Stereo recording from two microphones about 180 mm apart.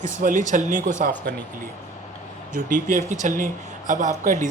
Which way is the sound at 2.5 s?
45° right (ahead or behind).